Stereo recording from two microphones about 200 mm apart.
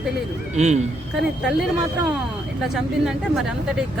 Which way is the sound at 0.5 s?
35° right (ahead or behind).